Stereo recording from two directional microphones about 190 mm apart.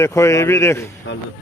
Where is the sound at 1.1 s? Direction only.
85° left.